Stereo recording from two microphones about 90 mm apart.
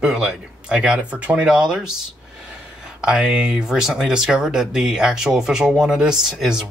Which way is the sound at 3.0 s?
5° right (ahead or behind).